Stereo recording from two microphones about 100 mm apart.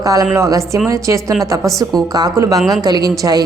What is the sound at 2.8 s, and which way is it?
Speech, 40° right (ahead or behind).